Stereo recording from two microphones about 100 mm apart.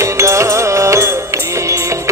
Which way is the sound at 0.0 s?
30° right (ahead or behind).